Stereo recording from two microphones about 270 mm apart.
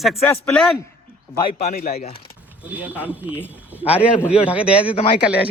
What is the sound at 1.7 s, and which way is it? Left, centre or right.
Speech, left.